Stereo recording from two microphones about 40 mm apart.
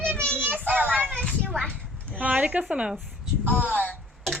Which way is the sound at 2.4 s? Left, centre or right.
Right.